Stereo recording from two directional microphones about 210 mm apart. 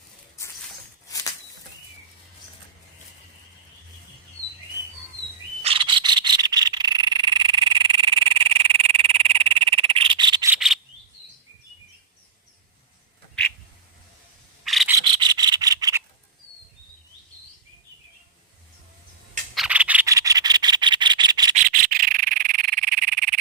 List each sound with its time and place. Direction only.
5.6 s frog: 25° right (ahead or behind)
10.5 s insect: centre (ahead or behind)
14.6 s scrape: centre (ahead or behind)
15.1 s rub: 20° right (ahead or behind)
19.5 s rub: 5° right (ahead or behind)
21.5 s frog: 40° right (ahead or behind)